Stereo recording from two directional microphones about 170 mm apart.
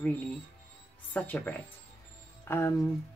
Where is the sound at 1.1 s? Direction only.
10° left (ahead or behind).